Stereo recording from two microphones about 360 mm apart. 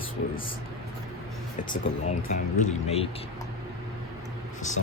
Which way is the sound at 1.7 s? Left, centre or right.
Centre.